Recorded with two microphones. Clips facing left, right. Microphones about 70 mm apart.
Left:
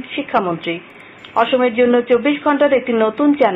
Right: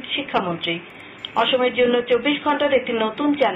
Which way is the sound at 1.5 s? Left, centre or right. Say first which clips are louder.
Left 4 dB; centre.